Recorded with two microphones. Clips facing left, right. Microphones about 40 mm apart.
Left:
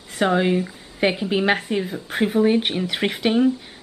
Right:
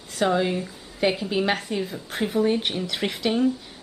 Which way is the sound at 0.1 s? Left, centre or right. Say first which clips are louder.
Left 3 dB; left.